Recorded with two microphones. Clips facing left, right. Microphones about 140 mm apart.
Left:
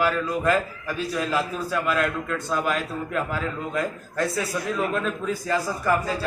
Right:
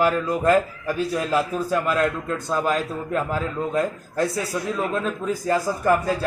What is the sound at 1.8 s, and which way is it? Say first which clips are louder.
A man's voice: right 2 dB; 35° right (ahead or behind).